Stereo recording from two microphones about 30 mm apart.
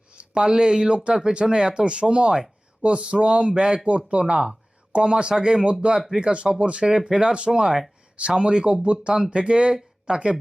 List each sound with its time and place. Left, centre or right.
0.1 s speech: right
3.8 s speech: right